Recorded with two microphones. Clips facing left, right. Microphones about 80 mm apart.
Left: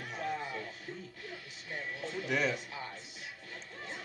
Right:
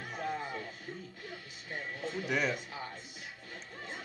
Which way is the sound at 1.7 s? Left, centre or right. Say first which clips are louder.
Right 1 dB; right.